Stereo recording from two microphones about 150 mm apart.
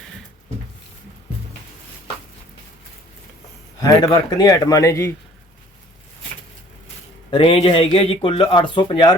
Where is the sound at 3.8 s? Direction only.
25° left (ahead or behind).